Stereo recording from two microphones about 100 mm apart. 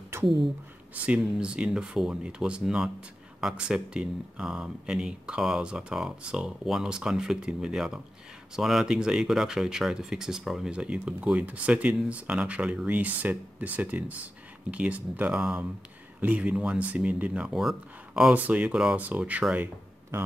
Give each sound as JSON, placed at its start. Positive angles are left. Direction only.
{"t": 0.1, "sound": "a sound", "side_deg": -25}
{"t": 1.0, "sound": "speech", "side_deg": -10}
{"t": 17.5, "sound": "speech", "side_deg": 0}